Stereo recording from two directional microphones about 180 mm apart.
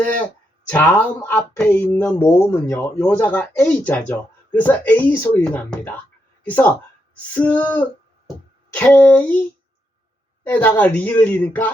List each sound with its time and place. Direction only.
0.0 s speech: 10° left (ahead or behind)
10.4 s speech: 10° left (ahead or behind)